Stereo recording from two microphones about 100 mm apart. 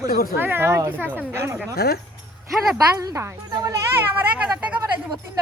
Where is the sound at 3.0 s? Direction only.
35° right (ahead or behind).